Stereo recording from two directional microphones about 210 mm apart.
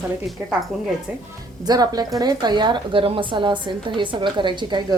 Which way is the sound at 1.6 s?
20° right (ahead or behind).